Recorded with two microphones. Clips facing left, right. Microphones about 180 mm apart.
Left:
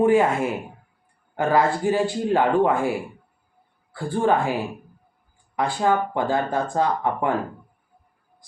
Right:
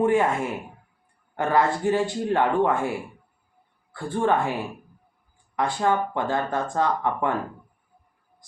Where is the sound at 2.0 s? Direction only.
35° left (ahead or behind).